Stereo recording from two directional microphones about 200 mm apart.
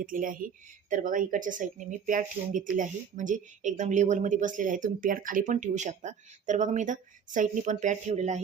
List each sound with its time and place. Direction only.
0.0 s speech: 45° right (ahead or behind)